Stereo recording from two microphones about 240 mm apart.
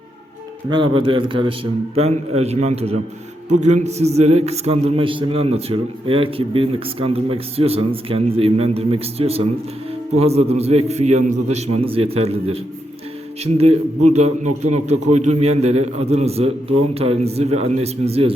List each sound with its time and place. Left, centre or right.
0.7 s a man's voice: right